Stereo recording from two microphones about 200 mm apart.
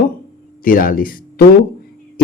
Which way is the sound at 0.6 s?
45° left (ahead or behind).